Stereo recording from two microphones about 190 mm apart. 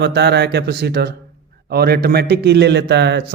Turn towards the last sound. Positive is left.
turn(degrees=-65)  # may be behind; listen again after turning